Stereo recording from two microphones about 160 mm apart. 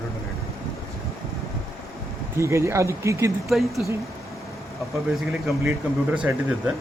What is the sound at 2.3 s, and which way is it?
Speech, 15° right (ahead or behind).